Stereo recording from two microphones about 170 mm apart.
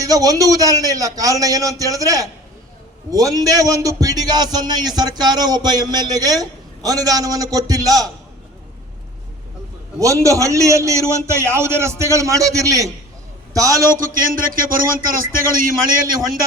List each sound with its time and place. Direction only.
0.0 s a man's voice: 20° right (ahead or behind)
10.0 s a man's voice: 20° right (ahead or behind)
13.9 s speech: 55° right (ahead or behind)